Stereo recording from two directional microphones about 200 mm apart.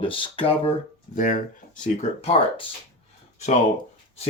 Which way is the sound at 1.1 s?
40° left (ahead or behind).